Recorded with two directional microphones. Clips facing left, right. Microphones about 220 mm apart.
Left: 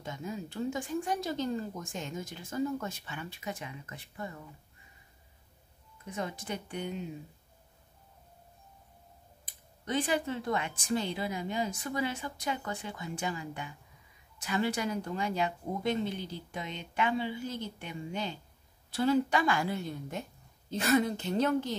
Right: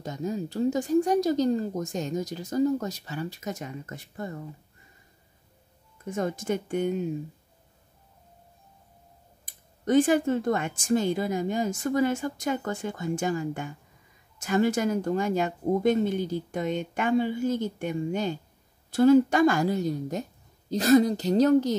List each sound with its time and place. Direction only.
0.0 s speech: 40° right (ahead or behind)
6.0 s speech: 45° right (ahead or behind)
9.5 s speech: 45° right (ahead or behind)